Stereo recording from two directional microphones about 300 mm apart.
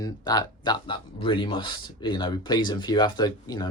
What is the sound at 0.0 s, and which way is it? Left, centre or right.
Speech, centre.